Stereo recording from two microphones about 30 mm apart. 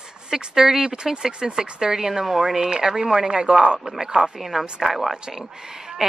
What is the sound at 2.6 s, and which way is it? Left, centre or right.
Speech, right.